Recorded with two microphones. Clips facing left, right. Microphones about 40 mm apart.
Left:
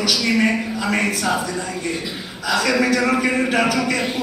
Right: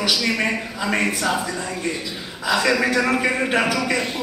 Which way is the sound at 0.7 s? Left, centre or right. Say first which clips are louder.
Left 1 dB; centre.